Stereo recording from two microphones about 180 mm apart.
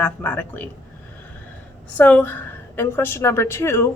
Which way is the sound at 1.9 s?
10° left (ahead or behind).